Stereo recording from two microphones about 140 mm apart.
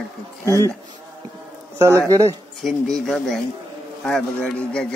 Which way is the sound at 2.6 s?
Centre (ahead or behind).